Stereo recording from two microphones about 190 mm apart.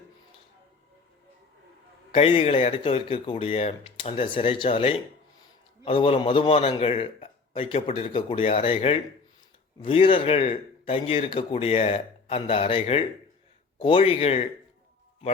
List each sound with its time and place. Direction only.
2.1 s speech: 30° left (ahead or behind)